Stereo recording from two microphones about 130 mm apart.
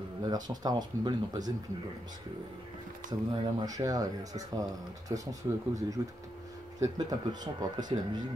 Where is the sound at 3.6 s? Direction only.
30° right (ahead or behind).